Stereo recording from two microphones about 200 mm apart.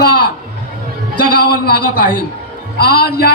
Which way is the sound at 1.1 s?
45° left (ahead or behind).